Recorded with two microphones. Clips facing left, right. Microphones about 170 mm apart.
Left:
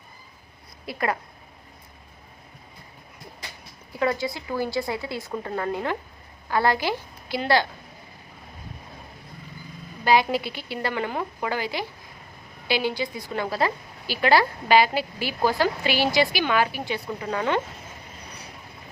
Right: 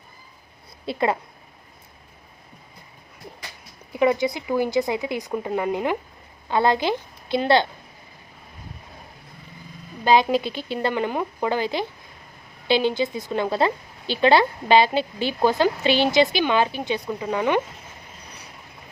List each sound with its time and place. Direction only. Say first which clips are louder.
0.9 s a woman's voice: right 4 dB; 25° right (ahead or behind)
3.9 s a woman's voice: right 5 dB; 20° right (ahead or behind)
10.0 s a woman's voice: right 3 dB; 20° right (ahead or behind)